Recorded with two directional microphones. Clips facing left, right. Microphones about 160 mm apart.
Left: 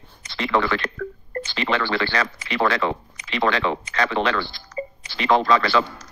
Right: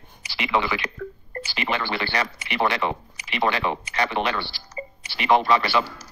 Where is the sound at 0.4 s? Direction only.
15° right (ahead or behind).